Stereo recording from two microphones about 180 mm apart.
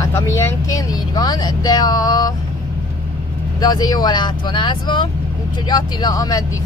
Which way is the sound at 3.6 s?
20° left (ahead or behind).